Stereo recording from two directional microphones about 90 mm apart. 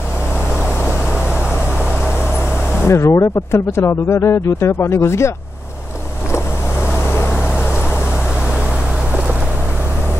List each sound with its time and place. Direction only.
2.8 s speech: 30° left (ahead or behind)